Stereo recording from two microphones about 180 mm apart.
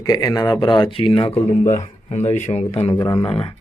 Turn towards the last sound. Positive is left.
turn(degrees=30)  # may be behind; listen again after turning